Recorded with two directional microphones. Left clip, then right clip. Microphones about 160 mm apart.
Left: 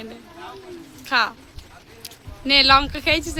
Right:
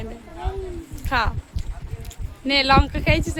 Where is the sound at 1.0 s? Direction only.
Centre (ahead or behind).